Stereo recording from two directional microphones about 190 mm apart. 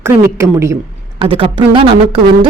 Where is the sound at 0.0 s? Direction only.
15° right (ahead or behind).